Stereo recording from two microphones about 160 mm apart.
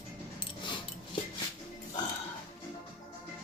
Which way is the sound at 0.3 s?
30° left (ahead or behind).